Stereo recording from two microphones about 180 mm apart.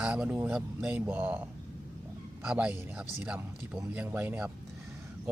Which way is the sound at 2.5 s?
5° right (ahead or behind).